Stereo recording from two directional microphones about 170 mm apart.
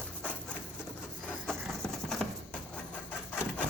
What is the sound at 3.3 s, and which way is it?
Vehicle, 10° left (ahead or behind).